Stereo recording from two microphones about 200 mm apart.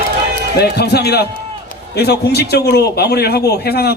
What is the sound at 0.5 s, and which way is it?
A man's voice, 55° left (ahead or behind).